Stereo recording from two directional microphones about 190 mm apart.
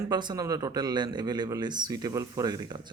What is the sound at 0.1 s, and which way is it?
Speech, 20° right (ahead or behind).